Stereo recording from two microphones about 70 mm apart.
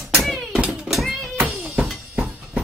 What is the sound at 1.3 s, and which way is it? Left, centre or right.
Cat, right.